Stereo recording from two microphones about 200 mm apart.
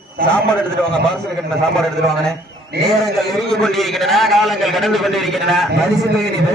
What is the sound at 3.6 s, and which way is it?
A man's voice, centre (ahead or behind).